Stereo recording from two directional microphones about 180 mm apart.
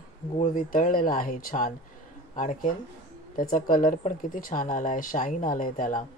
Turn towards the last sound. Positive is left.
turn(degrees=45)  # may be behind; listen again after turning